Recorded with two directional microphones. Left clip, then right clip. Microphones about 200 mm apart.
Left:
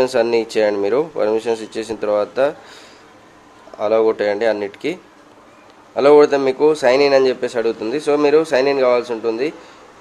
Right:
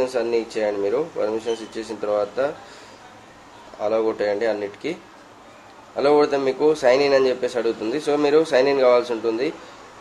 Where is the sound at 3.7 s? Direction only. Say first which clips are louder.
Left 6 dB; 30° left (ahead or behind).